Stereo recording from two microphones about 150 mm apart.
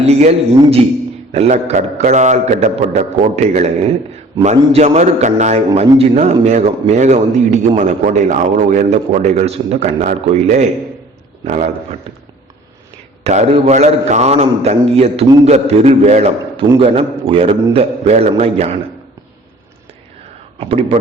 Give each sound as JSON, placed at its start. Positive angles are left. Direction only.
{"t": 0.0, "sound": "a man's voice", "side_deg": -45}
{"t": 13.2, "sound": "a man's voice", "side_deg": -50}
{"t": 20.6, "sound": "a man's voice", "side_deg": -40}